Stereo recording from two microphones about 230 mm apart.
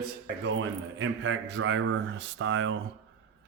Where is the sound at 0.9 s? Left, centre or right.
Right.